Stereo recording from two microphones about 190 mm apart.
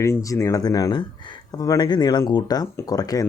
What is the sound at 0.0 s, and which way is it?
Speech, 15° left (ahead or behind).